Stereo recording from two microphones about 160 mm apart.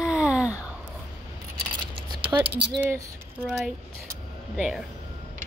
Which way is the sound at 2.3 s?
20° right (ahead or behind).